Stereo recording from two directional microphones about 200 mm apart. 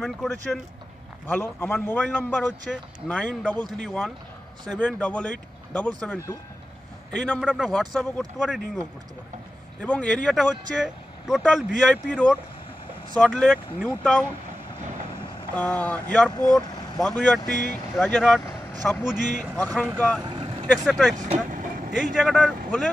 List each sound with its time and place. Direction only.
0.0 s a man's voice: centre (ahead or behind)
15.5 s a man's voice: 5° left (ahead or behind)
20.2 s vehicle: 25° right (ahead or behind)
20.6 s speech: 5° left (ahead or behind)
21.2 s vehicle: 40° right (ahead or behind)
21.9 s speech: centre (ahead or behind)